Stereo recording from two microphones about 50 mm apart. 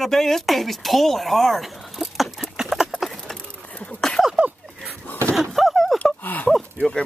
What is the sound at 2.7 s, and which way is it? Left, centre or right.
Horse, centre.